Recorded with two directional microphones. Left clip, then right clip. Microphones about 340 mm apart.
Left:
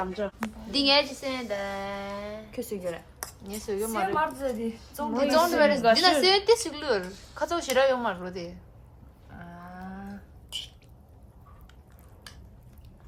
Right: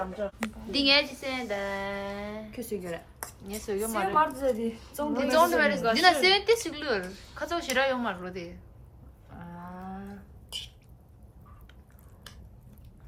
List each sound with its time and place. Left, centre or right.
0.7 s a woman's voice: centre
7.1 s speech: centre
7.3 s speech: centre
9.3 s a sound: centre